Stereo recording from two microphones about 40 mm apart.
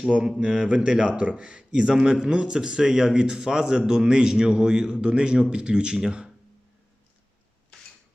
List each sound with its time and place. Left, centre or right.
0.3 s speech: right